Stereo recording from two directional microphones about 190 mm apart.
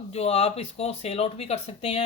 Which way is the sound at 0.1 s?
35° left (ahead or behind).